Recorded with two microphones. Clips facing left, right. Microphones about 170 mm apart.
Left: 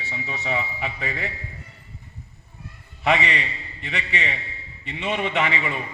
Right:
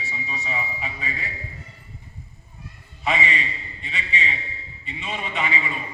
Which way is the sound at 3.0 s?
65° left (ahead or behind).